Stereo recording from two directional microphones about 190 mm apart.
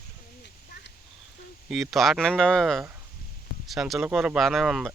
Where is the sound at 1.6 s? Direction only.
Centre (ahead or behind).